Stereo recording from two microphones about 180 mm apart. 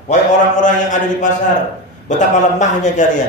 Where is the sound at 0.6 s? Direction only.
45° left (ahead or behind).